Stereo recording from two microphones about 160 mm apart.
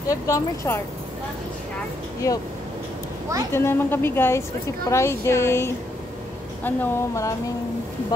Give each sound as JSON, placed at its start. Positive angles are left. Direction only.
{"t": 0.1, "sound": "speech", "side_deg": 20}
{"t": 3.5, "sound": "a woman's voice", "side_deg": 15}